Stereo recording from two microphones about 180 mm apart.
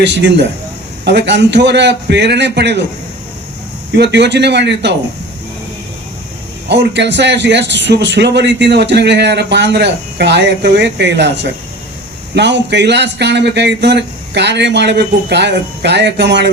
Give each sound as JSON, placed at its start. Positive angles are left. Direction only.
{"t": 1.0, "sound": "a man's voice", "side_deg": -75}
{"t": 3.9, "sound": "a man's voice", "side_deg": -70}
{"t": 6.7, "sound": "a man's voice", "side_deg": -75}
{"t": 12.3, "sound": "a man's voice", "side_deg": -70}